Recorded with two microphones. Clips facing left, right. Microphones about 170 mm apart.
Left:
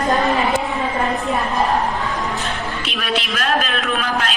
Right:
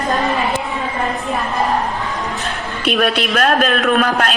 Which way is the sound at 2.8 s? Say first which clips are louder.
Right 10 dB; 55° right (ahead or behind).